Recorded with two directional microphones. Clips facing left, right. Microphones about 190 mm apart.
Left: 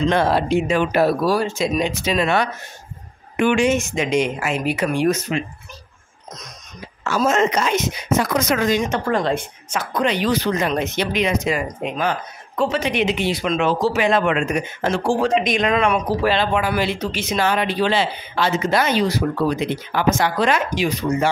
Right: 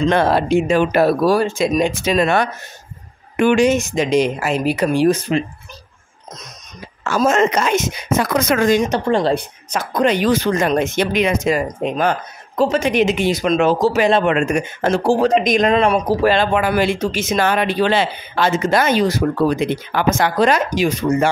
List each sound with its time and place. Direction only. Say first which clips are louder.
0.1 s speech: right 3 dB; 55° right (ahead or behind)
0.7 s speech: right 3 dB; 40° right (ahead or behind)
1.0 s speech: right 3 dB; 55° right (ahead or behind); by 5.4 s 30° right (ahead or behind)
7.1 s speech: right 3 dB; 50° right (ahead or behind)
9.0 s speech: right 4 dB; 30° right (ahead or behind)
16.3 s speech: right 3 dB; 50° right (ahead or behind)